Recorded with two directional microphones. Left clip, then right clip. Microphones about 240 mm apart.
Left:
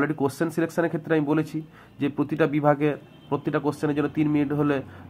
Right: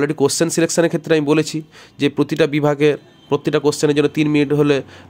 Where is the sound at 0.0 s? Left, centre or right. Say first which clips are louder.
Right 8 dB; right.